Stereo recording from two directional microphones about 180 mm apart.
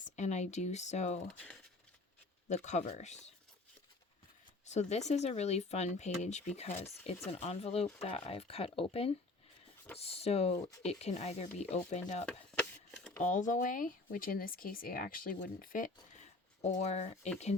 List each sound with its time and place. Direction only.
0.2 s speech: 40° left (ahead or behind)
2.5 s speech: 40° left (ahead or behind)
4.6 s speech: 40° left (ahead or behind)
12.2 s a sound: 5° left (ahead or behind)
13.2 s speech: 45° left (ahead or behind)